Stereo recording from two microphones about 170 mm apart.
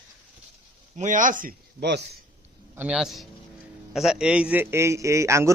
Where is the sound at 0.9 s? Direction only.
50° right (ahead or behind).